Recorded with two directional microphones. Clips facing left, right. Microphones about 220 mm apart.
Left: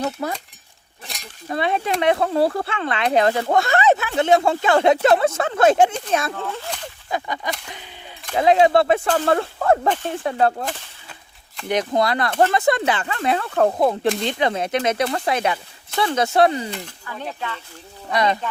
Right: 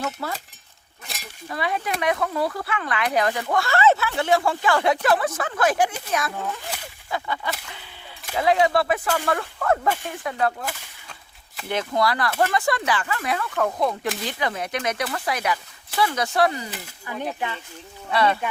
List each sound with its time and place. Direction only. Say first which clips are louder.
0.2 s speech: left 4 dB; 30° left (ahead or behind)
1.0 s chink: left 1 dB; 5° right (ahead or behind)
1.5 s speech: left 5 dB; 25° left (ahead or behind)
11.7 s speech: left 3 dB; 20° left (ahead or behind)
14.2 s speech: left 6 dB; 25° left (ahead or behind)
17.1 s speech: right 3 dB; 15° right (ahead or behind)
18.1 s speech: left 1 dB; 15° left (ahead or behind)